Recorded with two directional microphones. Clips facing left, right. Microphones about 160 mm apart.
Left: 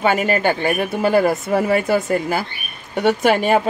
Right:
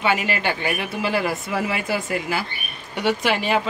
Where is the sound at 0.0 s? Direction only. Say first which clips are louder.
Left 5 dB; 45° left (ahead or behind).